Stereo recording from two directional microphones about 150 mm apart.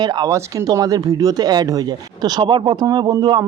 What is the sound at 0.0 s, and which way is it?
A man's voice, 30° right (ahead or behind).